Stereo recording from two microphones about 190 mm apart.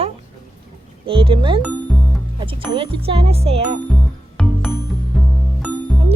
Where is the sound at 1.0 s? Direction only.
30° right (ahead or behind).